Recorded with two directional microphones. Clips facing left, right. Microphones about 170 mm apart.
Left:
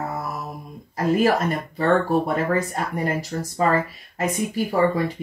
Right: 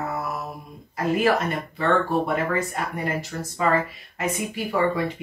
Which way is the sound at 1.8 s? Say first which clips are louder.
Left 2 dB; 35° left (ahead or behind).